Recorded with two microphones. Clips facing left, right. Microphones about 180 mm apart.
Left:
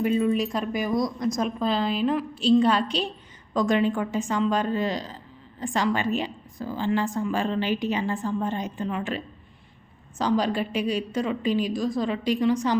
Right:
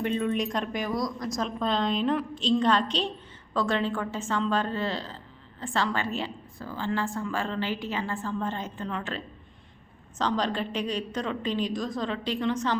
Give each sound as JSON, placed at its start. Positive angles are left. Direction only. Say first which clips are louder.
{"t": 0.0, "sound": "speech", "louder": "left 4 dB", "side_deg": 5}
{"t": 0.9, "sound": "a woman's voice", "louder": "left 5 dB", "side_deg": 20}
{"t": 1.4, "sound": "a woman's voice", "louder": "left 1 dB", "side_deg": 10}